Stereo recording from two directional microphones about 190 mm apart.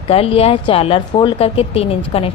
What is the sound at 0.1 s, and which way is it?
A woman's voice, 30° left (ahead or behind).